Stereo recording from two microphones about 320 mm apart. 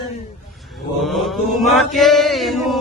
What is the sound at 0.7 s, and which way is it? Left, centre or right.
Mantra, centre.